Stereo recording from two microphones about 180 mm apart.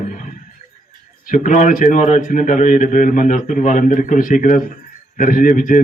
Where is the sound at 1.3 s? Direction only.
45° left (ahead or behind).